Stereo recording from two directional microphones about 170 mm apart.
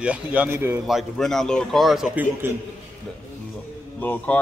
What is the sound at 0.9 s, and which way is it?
A man's voice, centre (ahead or behind).